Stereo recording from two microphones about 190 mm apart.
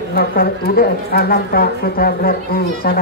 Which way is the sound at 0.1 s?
55° left (ahead or behind).